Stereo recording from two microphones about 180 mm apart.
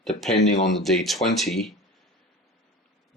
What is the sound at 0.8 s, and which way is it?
Speech, centre (ahead or behind).